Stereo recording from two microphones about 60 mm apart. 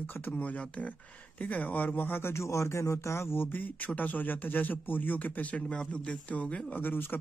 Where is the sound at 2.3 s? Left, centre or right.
Left.